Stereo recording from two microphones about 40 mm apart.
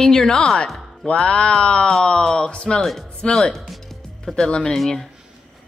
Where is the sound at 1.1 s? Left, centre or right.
Left.